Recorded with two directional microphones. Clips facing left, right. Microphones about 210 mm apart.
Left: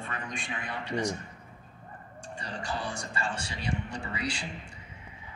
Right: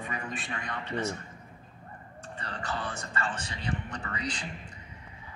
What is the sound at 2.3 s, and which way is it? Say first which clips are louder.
Speech: left 1 dB; 10° left (ahead or behind).